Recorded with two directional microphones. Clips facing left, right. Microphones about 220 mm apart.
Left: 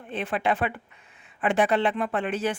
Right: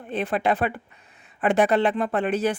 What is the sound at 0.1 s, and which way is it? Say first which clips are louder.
A woman's voice: right 3 dB; 40° right (ahead or behind).